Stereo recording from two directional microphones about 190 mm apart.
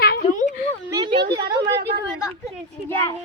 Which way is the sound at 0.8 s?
20° right (ahead or behind).